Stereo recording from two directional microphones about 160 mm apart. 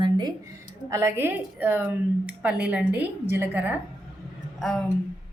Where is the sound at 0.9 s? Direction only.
15° right (ahead or behind).